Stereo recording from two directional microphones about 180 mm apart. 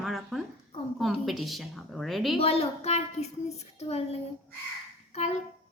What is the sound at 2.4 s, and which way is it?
A woman's voice, 35° left (ahead or behind).